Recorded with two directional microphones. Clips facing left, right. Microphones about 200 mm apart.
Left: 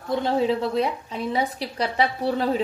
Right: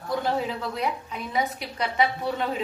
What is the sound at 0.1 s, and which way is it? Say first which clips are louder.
A woman's voice: left 5 dB; 25° left (ahead or behind).